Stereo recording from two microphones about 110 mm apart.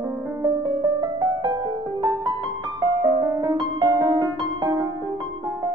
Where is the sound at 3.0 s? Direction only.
30° right (ahead or behind).